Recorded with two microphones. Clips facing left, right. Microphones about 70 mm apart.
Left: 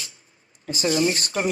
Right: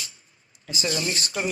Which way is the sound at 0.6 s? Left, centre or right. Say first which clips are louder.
Left 6 dB; left.